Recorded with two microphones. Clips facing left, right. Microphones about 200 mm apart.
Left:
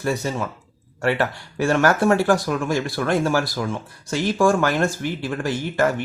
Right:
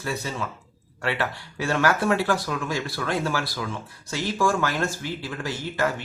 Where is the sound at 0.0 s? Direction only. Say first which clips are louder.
Left 6 dB; 45° left (ahead or behind).